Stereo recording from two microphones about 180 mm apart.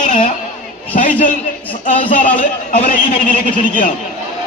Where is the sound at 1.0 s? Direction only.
45° left (ahead or behind).